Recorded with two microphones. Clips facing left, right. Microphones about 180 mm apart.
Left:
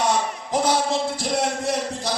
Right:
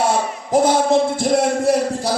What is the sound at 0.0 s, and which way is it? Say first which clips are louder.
A man's voice: right 3 dB; 50° right (ahead or behind).